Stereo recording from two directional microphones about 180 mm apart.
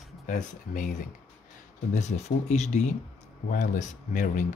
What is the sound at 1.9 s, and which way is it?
Speech, 40° left (ahead or behind).